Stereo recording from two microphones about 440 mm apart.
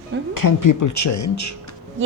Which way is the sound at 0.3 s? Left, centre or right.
Left.